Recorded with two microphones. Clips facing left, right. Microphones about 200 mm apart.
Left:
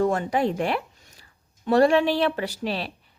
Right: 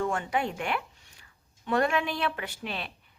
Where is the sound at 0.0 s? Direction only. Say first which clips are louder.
Left 7 dB; 35° left (ahead or behind).